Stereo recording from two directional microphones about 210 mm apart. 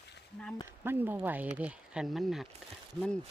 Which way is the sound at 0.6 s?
10° right (ahead or behind).